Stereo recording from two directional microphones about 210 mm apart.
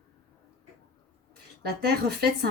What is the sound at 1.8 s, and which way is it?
Speech, 50° right (ahead or behind).